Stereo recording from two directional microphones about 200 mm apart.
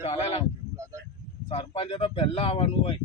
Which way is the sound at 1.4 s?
25° left (ahead or behind).